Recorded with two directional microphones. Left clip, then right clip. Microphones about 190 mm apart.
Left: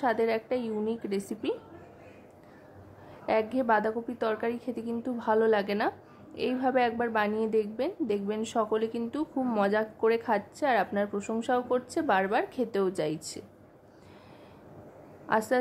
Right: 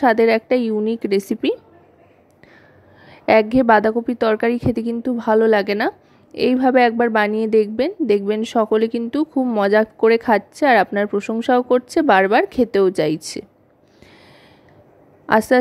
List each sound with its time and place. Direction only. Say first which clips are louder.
0.0 s a woman's voice: right 13 dB; 45° right (ahead or behind)
3.3 s a woman's voice: right 13 dB; 45° right (ahead or behind)
15.2 s a woman's voice: right 12 dB; 45° right (ahead or behind)